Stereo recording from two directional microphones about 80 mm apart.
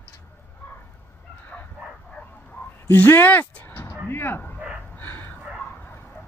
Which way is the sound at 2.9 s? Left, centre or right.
Left.